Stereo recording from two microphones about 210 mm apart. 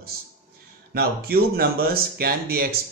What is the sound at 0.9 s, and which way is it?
Speech, 45° right (ahead or behind).